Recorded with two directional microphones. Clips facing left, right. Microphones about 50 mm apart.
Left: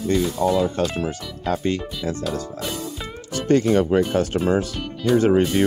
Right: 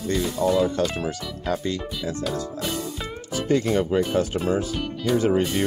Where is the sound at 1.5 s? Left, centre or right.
Left.